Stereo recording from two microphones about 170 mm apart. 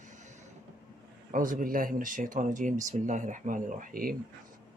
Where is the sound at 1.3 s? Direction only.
50° right (ahead or behind).